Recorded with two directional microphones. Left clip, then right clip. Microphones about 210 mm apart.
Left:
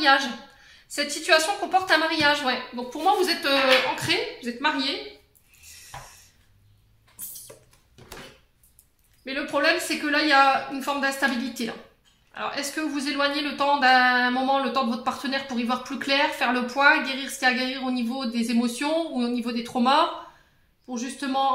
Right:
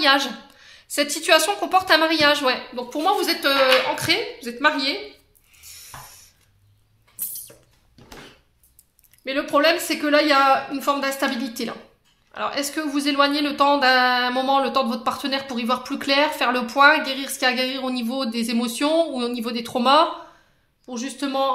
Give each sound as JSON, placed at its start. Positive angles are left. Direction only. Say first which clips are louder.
{"t": 0.0, "sound": "speech", "louder": "right 2 dB", "side_deg": -50}
{"t": 9.2, "sound": "speech", "louder": "right 5 dB", "side_deg": -50}